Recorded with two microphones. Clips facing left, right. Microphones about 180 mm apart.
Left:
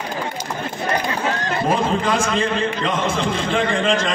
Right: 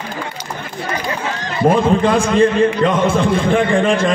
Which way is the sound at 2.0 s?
55° right (ahead or behind).